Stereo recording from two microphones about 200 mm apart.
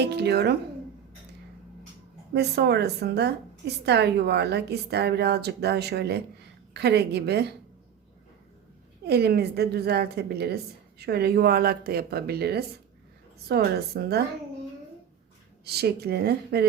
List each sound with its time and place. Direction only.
0.0 s a woman's voice: 55° right (ahead or behind)
2.3 s a woman's voice: 55° right (ahead or behind)
9.0 s a woman's voice: 55° right (ahead or behind)
15.6 s a woman's voice: 55° right (ahead or behind)